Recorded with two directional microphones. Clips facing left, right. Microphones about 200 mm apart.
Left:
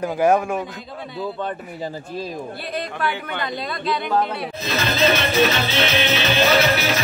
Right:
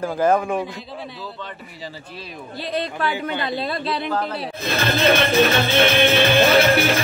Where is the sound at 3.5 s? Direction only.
30° right (ahead or behind).